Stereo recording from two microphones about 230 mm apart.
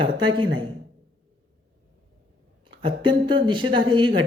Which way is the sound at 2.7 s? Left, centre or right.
Right.